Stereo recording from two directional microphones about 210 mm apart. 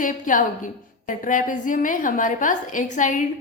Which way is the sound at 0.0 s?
40° left (ahead or behind).